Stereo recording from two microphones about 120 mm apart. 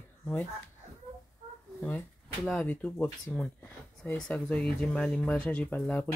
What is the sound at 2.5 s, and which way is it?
Speech, 10° left (ahead or behind).